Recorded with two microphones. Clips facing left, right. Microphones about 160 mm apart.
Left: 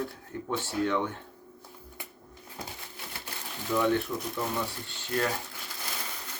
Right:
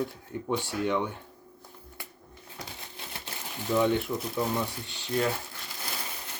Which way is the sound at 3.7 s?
20° right (ahead or behind).